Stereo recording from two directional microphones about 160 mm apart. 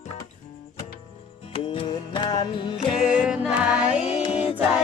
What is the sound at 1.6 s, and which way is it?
Music, 35° left (ahead or behind).